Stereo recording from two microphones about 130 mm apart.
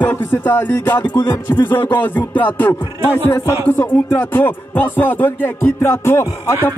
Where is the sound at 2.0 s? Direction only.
15° left (ahead or behind).